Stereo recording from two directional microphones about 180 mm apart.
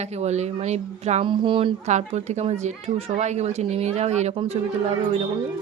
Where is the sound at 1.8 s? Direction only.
40° right (ahead or behind).